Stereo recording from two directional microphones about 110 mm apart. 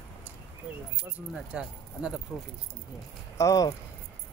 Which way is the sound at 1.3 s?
10° right (ahead or behind).